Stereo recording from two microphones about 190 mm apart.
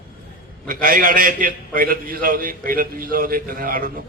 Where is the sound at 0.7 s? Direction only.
50° right (ahead or behind).